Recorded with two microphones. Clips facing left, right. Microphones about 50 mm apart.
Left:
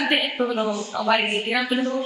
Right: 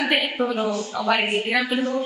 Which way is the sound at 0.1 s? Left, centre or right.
Centre.